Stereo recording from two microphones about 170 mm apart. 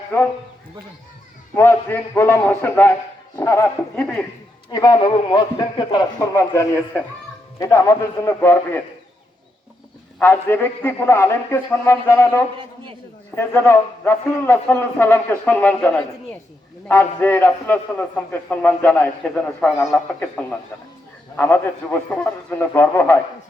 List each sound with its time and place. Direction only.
1.5 s a man's voice: 15° left (ahead or behind)
4.7 s a man's voice: 25° left (ahead or behind)
10.2 s a man's voice: 10° left (ahead or behind)
12.5 s a man's voice: 30° right (ahead or behind)
13.3 s a man's voice: 10° left (ahead or behind)